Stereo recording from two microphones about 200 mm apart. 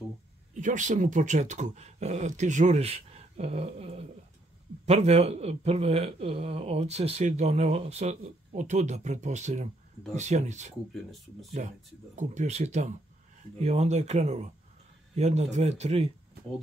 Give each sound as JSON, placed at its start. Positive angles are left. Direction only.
{"t": 0.6, "sound": "speech", "side_deg": -40}